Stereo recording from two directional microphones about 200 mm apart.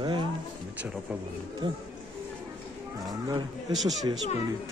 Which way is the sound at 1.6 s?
25° right (ahead or behind).